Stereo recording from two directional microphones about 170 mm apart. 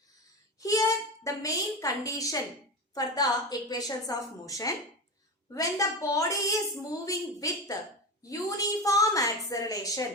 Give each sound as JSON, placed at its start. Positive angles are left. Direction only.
{"t": 0.6, "sound": "a child's voice", "side_deg": 20}